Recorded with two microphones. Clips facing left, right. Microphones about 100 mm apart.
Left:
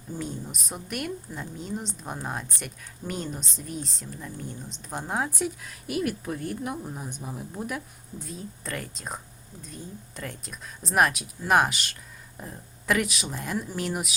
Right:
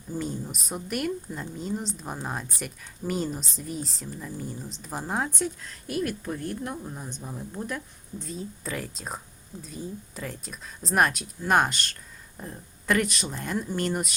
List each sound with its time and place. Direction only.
0.2 s speech: centre (ahead or behind)